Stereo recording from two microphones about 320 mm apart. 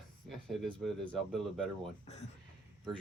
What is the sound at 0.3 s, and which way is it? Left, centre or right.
Speech, centre.